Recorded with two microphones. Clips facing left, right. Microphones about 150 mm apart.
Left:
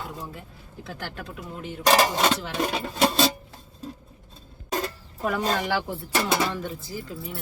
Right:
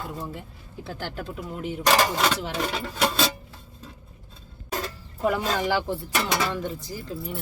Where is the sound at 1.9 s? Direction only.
25° left (ahead or behind).